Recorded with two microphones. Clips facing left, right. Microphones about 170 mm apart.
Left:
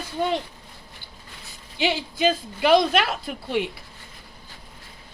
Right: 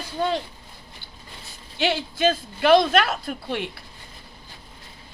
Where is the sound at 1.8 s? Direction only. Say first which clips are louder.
Even; 15° left (ahead or behind).